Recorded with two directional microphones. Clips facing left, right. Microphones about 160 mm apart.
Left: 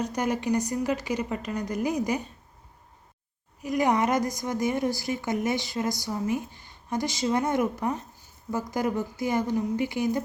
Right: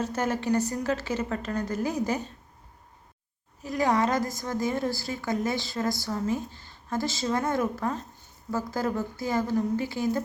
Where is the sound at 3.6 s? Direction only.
20° left (ahead or behind).